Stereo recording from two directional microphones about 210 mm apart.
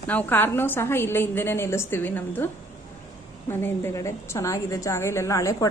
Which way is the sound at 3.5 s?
10° left (ahead or behind).